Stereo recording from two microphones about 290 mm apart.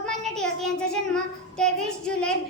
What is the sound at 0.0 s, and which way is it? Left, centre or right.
Child singing, centre.